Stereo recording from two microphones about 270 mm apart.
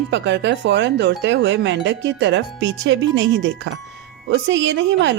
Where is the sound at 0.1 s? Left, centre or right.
Right.